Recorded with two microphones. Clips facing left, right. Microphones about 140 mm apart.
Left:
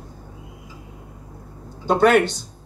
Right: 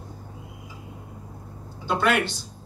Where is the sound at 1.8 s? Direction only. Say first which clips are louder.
Left 7 dB; 45° left (ahead or behind).